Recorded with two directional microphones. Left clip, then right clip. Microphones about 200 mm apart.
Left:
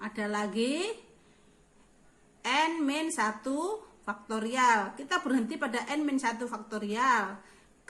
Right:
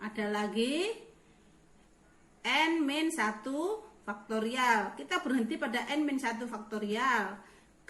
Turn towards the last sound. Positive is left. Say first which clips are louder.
# left 3 dB
turn(degrees=25)  # may be behind; listen again after turning